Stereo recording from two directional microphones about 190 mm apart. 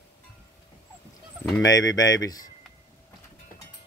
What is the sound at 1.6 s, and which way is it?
Speech, 20° left (ahead or behind).